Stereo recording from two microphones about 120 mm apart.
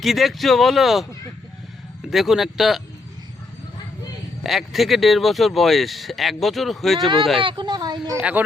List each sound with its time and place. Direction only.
0.0 s speech: centre (ahead or behind)
2.0 s speech: 5° right (ahead or behind)
4.4 s speech: centre (ahead or behind)
7.3 s speech: 40° right (ahead or behind)